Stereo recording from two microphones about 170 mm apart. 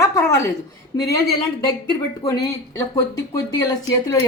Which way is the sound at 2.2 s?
20° left (ahead or behind).